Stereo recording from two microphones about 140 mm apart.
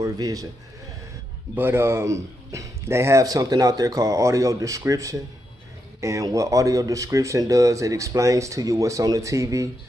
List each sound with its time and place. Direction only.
0.0 s a man's voice: 25° right (ahead or behind)
1.5 s speech: 15° right (ahead or behind)